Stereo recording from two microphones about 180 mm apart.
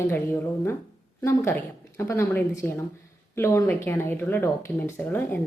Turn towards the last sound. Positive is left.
turn(degrees=10)  # may be behind; listen again after turning